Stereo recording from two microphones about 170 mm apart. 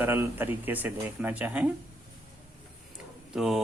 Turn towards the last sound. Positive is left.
turn(degrees=0)  # may be behind; listen again after turning